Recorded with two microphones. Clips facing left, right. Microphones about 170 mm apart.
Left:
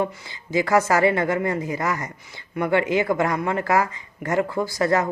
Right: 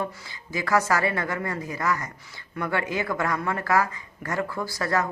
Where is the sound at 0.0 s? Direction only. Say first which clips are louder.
Left 6 dB; 25° left (ahead or behind).